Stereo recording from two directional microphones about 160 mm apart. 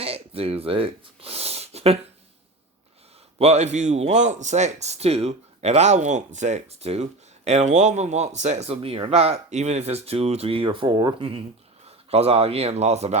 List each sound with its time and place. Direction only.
0.0 s speech: 40° right (ahead or behind)
3.3 s a man's voice: 40° right (ahead or behind)